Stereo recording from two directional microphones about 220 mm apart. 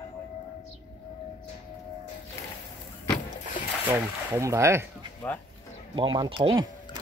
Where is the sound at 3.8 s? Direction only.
10° right (ahead or behind).